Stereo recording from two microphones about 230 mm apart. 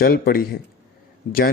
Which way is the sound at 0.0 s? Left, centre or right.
Left.